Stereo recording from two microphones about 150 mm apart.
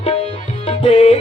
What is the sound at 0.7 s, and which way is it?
Tabla, 40° left (ahead or behind).